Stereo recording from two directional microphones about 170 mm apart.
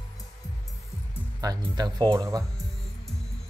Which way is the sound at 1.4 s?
20° right (ahead or behind).